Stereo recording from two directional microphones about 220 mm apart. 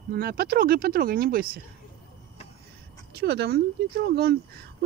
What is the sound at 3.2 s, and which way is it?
Speech, 45° right (ahead or behind).